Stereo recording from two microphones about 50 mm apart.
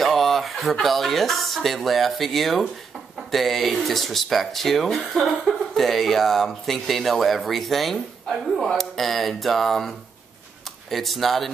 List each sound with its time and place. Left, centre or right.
0.0 s speech: centre